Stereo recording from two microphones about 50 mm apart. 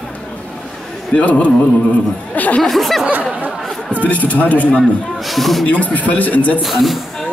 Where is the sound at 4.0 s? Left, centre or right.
Left.